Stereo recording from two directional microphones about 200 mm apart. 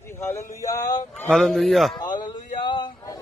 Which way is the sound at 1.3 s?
Centre (ahead or behind).